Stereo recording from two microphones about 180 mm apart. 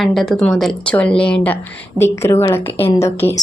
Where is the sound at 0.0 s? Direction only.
Centre (ahead or behind).